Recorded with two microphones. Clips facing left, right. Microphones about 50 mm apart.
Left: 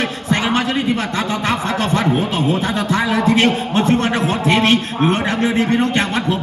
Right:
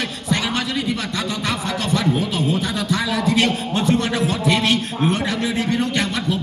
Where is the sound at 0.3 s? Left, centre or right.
Left.